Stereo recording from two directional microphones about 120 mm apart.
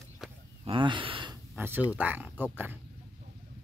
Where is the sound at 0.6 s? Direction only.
40° right (ahead or behind).